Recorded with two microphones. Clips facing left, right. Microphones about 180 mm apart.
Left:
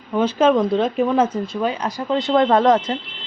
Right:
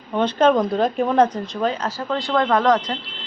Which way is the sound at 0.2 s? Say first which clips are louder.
Left 1 dB; 5° left (ahead or behind).